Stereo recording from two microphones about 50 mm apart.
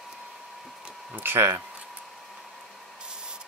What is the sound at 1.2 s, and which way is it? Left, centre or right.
Speech, right.